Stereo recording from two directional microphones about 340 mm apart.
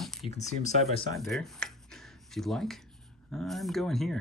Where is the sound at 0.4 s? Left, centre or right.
Centre.